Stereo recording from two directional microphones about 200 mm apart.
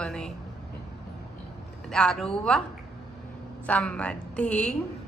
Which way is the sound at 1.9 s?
5° left (ahead or behind).